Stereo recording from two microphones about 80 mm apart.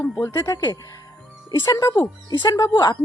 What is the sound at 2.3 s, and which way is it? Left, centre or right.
Speech, left.